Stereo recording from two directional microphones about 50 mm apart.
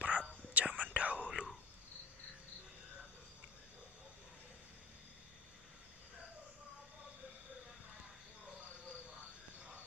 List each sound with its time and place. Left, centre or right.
0.0 s whispering: right